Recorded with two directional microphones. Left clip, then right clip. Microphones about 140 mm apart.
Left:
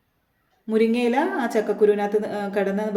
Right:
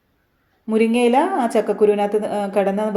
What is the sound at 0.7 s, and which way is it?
Speech, 15° right (ahead or behind).